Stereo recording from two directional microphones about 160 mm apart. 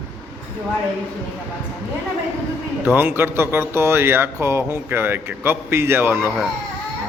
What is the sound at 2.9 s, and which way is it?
Speech, 10° right (ahead or behind).